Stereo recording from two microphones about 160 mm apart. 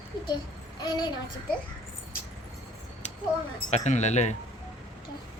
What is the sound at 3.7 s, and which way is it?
Speech, 45° left (ahead or behind).